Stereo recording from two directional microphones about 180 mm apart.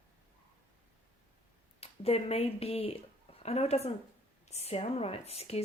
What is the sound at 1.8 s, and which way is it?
Speech, 35° left (ahead or behind).